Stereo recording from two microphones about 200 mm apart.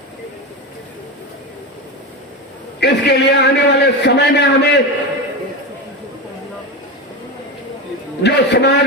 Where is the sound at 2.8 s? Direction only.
55° left (ahead or behind).